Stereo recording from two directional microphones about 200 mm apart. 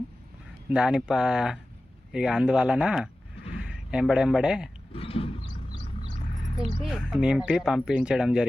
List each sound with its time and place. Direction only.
0.7 s speech: 5° right (ahead or behind)
4.9 s roaring cats: 30° left (ahead or behind)
6.8 s speech: 5° right (ahead or behind)